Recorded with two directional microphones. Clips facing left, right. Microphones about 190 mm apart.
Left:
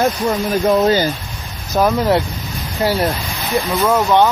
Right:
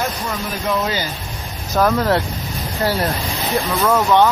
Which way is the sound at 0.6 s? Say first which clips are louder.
Left 7 dB; 40° left (ahead or behind).